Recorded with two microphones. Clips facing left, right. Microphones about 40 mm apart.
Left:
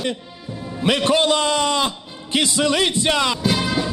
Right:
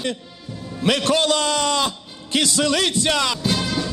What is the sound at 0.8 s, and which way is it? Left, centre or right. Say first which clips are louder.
A man's voice: left 1 dB; left.